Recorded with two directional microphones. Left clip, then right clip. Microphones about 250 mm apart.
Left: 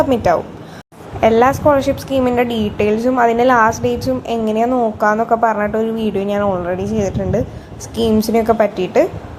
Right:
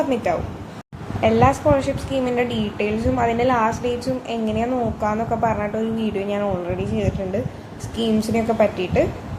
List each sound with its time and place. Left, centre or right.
0.1 s a woman's voice: left